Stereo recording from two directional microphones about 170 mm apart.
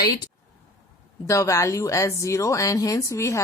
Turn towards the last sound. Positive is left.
turn(degrees=15)  # may be behind; listen again after turning